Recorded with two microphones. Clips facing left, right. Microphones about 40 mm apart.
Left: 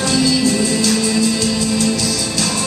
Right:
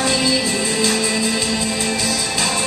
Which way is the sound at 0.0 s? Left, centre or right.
Right.